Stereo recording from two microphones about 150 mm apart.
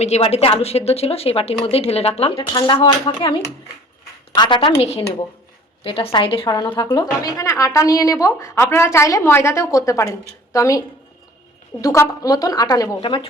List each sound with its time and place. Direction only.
0.0 s a woman's voice: 45° left (ahead or behind)
2.5 s speech: 25° left (ahead or behind)
4.4 s speech: 35° left (ahead or behind)
6.9 s a woman's voice: 25° left (ahead or behind)
13.0 s speech: 35° left (ahead or behind)